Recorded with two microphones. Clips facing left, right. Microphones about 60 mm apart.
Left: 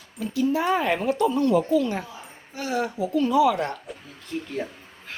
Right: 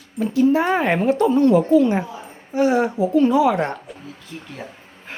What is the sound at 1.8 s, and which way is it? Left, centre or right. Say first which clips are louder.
A woman's voice: right 8 dB; right.